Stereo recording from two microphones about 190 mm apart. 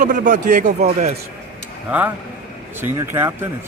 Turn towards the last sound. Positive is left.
turn(degrees=-10)  # may be behind; listen again after turning